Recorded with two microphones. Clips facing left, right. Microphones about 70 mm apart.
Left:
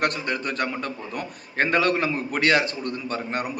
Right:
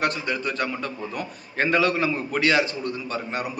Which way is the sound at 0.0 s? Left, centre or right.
Left.